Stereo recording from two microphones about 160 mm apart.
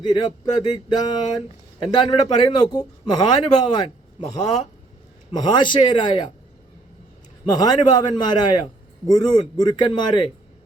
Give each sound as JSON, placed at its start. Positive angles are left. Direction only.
{"t": 0.0, "sound": "a man's voice", "side_deg": 25}
{"t": 5.3, "sound": "a man's voice", "side_deg": 25}
{"t": 7.4, "sound": "a man's voice", "side_deg": 25}